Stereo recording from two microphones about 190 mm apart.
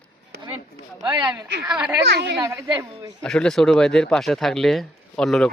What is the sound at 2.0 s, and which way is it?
Speech, 65° right (ahead or behind).